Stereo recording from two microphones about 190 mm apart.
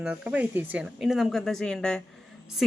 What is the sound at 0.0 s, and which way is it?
Speech, 5° right (ahead or behind).